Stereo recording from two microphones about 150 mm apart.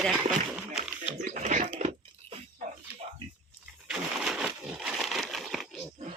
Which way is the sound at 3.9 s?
5° right (ahead or behind).